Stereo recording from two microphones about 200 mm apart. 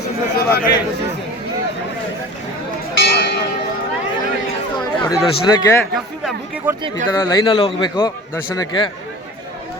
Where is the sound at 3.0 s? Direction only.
55° left (ahead or behind).